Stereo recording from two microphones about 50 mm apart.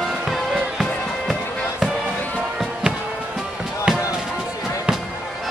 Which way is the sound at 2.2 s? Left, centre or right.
Left.